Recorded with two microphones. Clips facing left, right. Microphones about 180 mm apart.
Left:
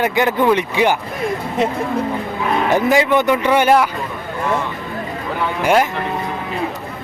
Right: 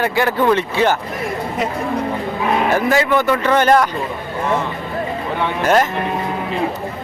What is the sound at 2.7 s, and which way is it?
A man's voice, 15° left (ahead or behind).